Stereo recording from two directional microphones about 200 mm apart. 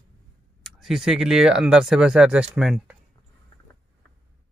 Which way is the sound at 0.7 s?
Centre (ahead or behind).